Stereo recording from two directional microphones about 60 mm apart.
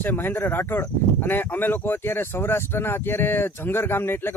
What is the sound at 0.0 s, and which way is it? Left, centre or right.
Speech, left.